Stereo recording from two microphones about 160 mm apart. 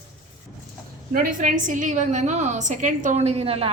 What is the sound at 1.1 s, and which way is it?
A woman's voice, 55° right (ahead or behind).